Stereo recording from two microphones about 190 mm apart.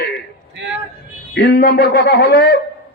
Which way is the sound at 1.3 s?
60° left (ahead or behind).